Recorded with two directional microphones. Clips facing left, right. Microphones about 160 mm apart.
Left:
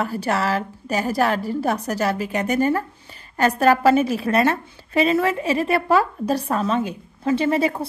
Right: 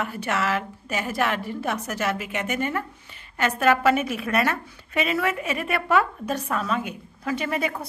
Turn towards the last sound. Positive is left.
turn(degrees=30)  # may be behind; listen again after turning